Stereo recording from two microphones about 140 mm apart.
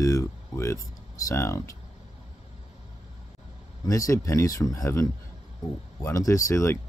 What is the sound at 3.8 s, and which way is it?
Speech, 25° left (ahead or behind).